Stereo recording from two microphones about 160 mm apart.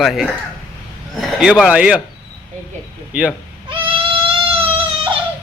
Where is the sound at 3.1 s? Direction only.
10° right (ahead or behind).